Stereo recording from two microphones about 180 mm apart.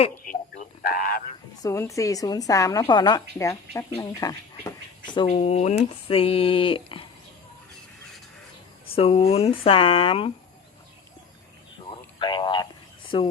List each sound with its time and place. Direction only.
0.8 s speech: 55° left (ahead or behind)
1.6 s speech: 15° left (ahead or behind)
5.3 s speech: 40° left (ahead or behind)
9.0 s speech: 35° left (ahead or behind)
12.2 s speech: 25° left (ahead or behind)